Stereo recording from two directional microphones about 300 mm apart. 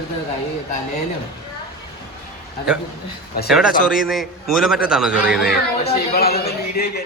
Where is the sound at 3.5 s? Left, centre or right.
Centre.